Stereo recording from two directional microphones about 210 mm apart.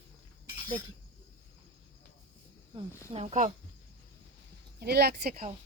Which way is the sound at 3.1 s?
35° right (ahead or behind).